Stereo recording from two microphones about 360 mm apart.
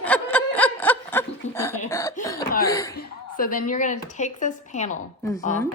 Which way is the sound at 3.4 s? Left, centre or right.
Left.